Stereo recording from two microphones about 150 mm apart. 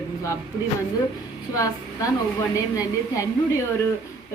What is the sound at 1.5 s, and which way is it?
Speech, 20° left (ahead or behind).